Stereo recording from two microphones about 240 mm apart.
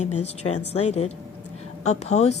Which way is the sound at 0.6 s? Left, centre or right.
Left.